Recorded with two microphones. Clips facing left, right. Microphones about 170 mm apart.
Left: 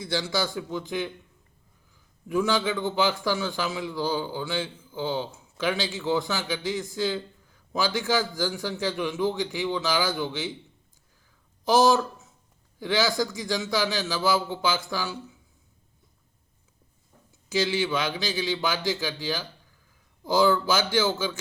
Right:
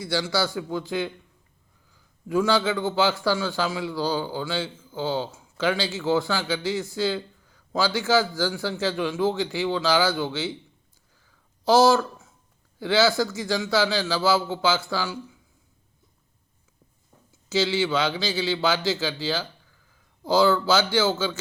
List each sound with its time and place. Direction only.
0.3 s speech: 20° left (ahead or behind)
2.3 s a man's voice: 20° left (ahead or behind)
11.6 s a man's voice: 20° left (ahead or behind)
17.5 s a man's voice: 15° left (ahead or behind)